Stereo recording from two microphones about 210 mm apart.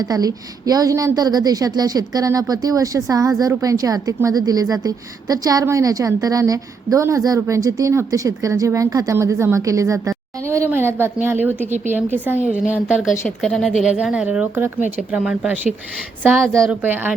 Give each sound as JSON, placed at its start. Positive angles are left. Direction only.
{"t": 0.0, "sound": "a woman's voice", "side_deg": -20}